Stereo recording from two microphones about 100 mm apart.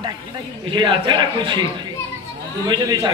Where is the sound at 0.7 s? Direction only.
55° right (ahead or behind).